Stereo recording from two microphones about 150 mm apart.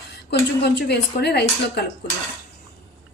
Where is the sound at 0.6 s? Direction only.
90° left.